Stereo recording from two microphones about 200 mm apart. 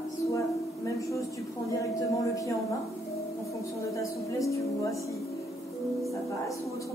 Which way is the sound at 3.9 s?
15° left (ahead or behind).